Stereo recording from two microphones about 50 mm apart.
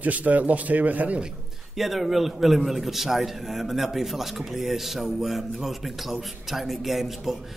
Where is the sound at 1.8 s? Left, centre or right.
Centre.